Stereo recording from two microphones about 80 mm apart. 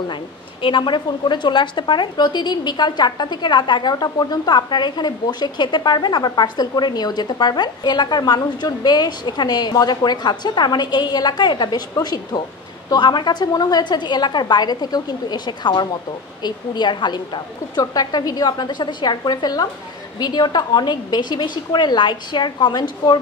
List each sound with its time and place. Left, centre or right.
0.1 s a woman's voice: left
12.9 s a woman's voice: left